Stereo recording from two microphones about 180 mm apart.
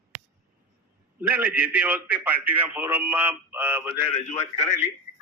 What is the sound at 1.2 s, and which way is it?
A man's voice, 10° right (ahead or behind).